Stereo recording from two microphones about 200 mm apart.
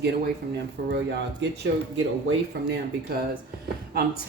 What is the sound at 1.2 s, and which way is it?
Speech, 70° right (ahead or behind).